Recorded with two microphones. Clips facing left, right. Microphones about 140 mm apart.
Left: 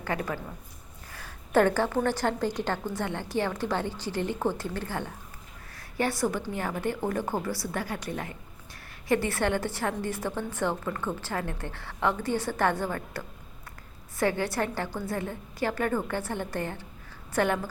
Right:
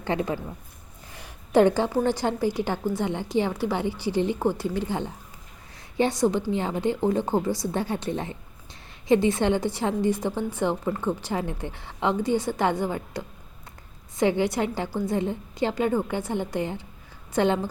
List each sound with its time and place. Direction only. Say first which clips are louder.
0.0 s a woman's voice: right 5 dB; 20° right (ahead or behind)